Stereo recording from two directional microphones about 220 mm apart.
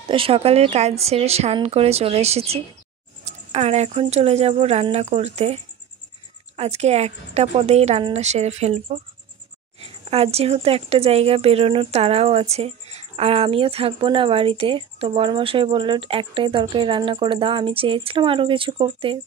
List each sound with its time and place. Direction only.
0.1 s speech: 25° right (ahead or behind)